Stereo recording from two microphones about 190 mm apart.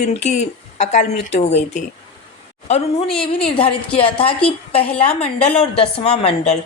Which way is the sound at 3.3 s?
30° left (ahead or behind).